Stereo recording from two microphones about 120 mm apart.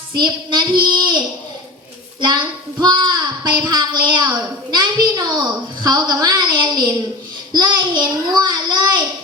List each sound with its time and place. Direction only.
0.1 s a woman's voice: 40° right (ahead or behind)
2.8 s a woman's voice: 40° right (ahead or behind)